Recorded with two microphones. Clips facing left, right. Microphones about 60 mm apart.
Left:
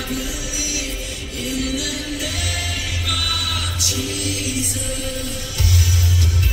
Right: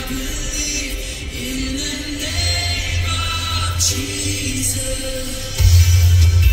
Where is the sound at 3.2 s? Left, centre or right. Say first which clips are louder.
Right 1 dB; right.